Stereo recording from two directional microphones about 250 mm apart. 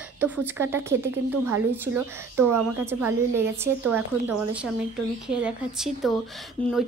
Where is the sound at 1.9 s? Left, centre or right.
Centre.